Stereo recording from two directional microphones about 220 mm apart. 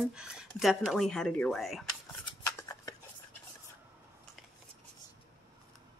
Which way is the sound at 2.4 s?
15° left (ahead or behind).